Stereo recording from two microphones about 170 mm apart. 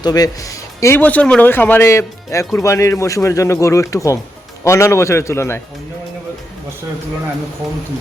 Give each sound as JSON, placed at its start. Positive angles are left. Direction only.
{"t": 0.0, "sound": "speech", "side_deg": 20}